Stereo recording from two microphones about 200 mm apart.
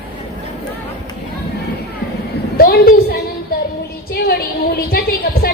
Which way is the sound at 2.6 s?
50° left (ahead or behind).